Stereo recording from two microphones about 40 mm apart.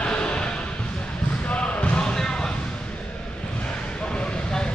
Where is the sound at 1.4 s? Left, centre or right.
Left.